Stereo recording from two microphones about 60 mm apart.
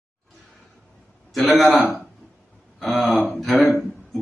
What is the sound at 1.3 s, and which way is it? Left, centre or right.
A man's voice, centre.